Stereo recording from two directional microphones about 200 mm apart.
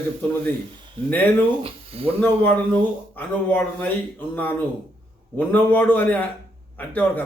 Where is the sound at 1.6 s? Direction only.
30° right (ahead or behind).